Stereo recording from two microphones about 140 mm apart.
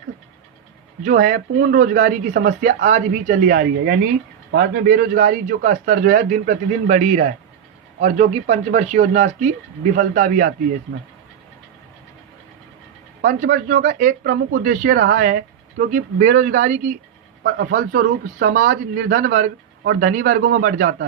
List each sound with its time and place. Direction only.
1.0 s a man's voice: 85° right; by 9.5 s 55° right (ahead or behind)
9.9 s speech: 70° right (ahead or behind)
13.2 s speech: 70° right (ahead or behind)
17.4 s a man's voice: 90° right